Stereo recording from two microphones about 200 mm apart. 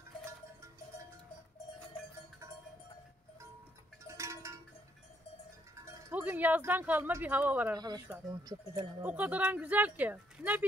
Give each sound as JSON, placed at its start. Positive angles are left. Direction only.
{"t": 4.1, "sound": "cowbell", "side_deg": -15}
{"t": 5.8, "sound": "speech", "side_deg": -10}
{"t": 7.7, "sound": "speech", "side_deg": -20}
{"t": 9.0, "sound": "speech", "side_deg": -5}